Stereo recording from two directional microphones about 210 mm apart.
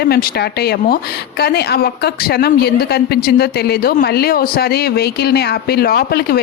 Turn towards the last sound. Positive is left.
turn(degrees=45)  # may be behind; listen again after turning